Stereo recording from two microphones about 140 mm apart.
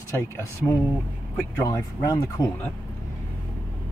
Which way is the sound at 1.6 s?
20° left (ahead or behind).